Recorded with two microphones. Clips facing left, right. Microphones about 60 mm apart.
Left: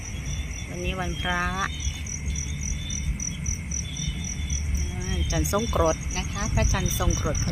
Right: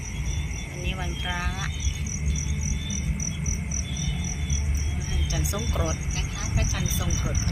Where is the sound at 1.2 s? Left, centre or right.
Left.